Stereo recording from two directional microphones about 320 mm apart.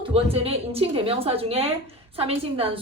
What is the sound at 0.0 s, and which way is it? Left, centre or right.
A woman's voice, centre.